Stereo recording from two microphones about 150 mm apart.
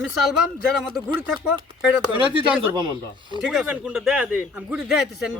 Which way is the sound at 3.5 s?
5° right (ahead or behind).